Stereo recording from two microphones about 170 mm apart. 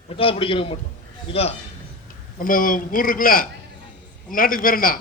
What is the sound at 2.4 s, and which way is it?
A man's voice, 55° left (ahead or behind).